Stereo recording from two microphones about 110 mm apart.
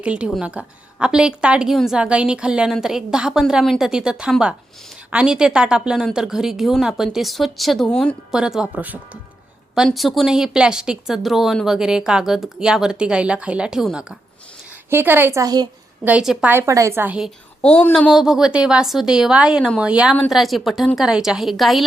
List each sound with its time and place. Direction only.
0.0 s a woman's voice: 10° right (ahead or behind); by 8.1 s 5° left (ahead or behind)
8.3 s a woman's voice: 5° right (ahead or behind)
9.7 s a woman's voice: 5° right (ahead or behind)
14.8 s a woman's voice: 20° right (ahead or behind)
15.4 s a child's voice: 35° right (ahead or behind)
16.0 s a woman's voice: 5° right (ahead or behind)
16.5 s a woman's voice: 25° right (ahead or behind)
17.6 s speech: 10° left (ahead or behind)
18.1 s a woman's voice: 5° right (ahead or behind)